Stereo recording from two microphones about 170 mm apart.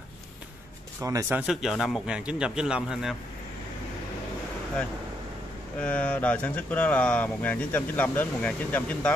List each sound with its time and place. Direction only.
1.0 s speech: 20° right (ahead or behind)
1.4 s a man's voice: 5° right (ahead or behind)
5.8 s speech: 5° left (ahead or behind)